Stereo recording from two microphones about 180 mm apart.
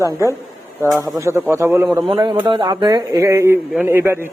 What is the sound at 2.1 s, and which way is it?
A man's voice, 30° right (ahead or behind).